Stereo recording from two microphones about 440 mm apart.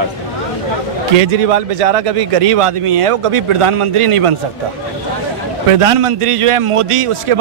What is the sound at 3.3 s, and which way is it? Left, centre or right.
A man's voice, right.